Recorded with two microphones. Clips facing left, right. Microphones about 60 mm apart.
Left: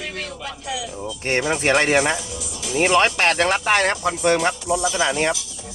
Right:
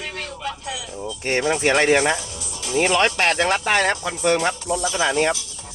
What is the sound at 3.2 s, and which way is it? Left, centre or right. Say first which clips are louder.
Speech: left 1 dB; left.